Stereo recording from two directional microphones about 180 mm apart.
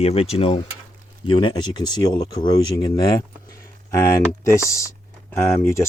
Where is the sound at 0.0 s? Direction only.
35° left (ahead or behind).